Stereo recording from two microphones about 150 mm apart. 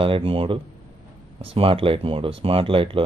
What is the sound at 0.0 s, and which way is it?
Speech, 35° right (ahead or behind).